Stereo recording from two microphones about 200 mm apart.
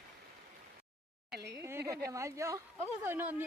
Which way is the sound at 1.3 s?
55° right (ahead or behind).